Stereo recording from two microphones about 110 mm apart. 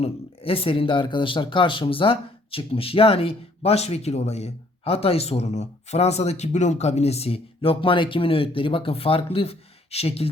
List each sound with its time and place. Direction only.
0.0 s speech: 60° left (ahead or behind)